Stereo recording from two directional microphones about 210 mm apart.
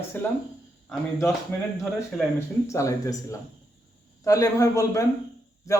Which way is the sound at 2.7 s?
15° left (ahead or behind).